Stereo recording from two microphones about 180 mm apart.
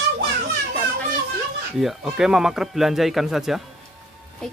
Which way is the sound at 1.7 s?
Centre (ahead or behind).